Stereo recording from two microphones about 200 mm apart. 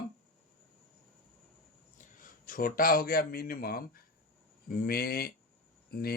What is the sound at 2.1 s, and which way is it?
Speech, 45° left (ahead or behind).